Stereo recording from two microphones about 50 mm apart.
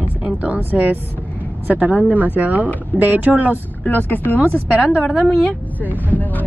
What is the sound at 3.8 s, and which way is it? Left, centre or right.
Speech, left.